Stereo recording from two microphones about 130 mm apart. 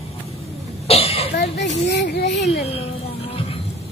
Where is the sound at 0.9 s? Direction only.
50° left (ahead or behind).